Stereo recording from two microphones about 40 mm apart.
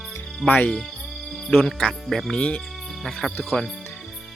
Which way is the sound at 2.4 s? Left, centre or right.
Left.